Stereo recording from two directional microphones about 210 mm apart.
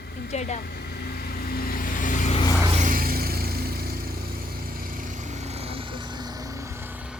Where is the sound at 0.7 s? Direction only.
50° left (ahead or behind).